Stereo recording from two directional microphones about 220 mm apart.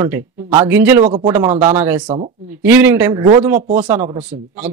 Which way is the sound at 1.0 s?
25° right (ahead or behind).